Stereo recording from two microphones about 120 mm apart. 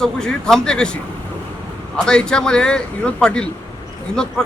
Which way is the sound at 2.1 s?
5° left (ahead or behind).